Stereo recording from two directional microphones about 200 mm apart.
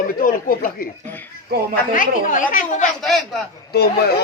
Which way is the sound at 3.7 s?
50° left (ahead or behind).